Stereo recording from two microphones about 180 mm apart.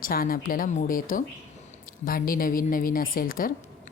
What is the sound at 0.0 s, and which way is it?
Speech, 55° left (ahead or behind).